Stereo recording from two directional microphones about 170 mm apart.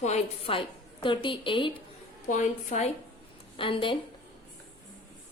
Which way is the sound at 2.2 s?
45° left (ahead or behind).